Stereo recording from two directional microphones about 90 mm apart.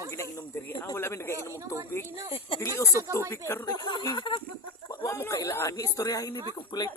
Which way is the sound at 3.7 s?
55° left (ahead or behind).